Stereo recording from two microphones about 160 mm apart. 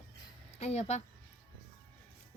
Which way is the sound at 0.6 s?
45° left (ahead or behind).